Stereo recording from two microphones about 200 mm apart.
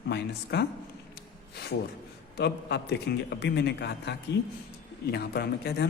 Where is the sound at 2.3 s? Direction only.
55° left (ahead or behind).